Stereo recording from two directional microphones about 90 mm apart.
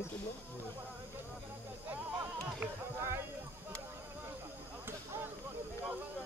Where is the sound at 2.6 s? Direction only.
30° right (ahead or behind).